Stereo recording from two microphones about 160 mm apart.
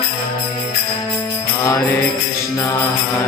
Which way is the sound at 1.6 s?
20° left (ahead or behind).